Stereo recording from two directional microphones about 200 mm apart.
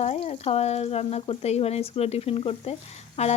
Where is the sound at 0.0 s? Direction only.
35° left (ahead or behind).